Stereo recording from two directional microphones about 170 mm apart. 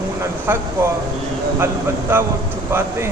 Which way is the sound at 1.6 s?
15° right (ahead or behind).